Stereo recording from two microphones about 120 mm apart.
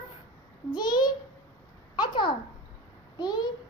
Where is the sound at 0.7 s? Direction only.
35° left (ahead or behind).